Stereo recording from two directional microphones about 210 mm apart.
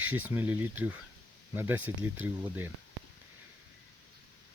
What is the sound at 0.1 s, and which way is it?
Speech, 10° right (ahead or behind).